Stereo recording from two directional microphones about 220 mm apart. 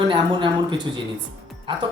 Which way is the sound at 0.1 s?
20° right (ahead or behind).